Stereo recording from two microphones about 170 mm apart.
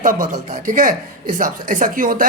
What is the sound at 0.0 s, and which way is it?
A man's voice, 50° right (ahead or behind).